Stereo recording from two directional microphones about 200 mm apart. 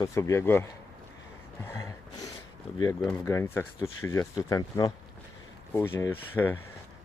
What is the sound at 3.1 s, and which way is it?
Speech, 15° left (ahead or behind).